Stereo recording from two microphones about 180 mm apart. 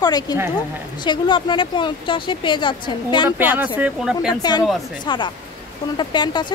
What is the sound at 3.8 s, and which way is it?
Speech, 5° right (ahead or behind).